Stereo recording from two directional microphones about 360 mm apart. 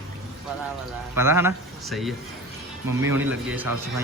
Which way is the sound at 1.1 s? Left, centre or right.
Centre.